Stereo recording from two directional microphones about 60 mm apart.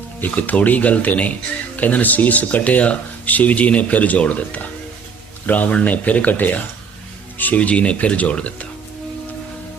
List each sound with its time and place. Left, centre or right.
0.2 s speech: left